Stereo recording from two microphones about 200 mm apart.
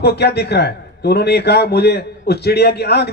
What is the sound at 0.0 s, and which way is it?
A man's voice, 55° left (ahead or behind).